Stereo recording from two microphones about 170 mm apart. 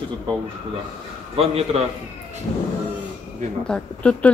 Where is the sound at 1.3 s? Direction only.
35° right (ahead or behind).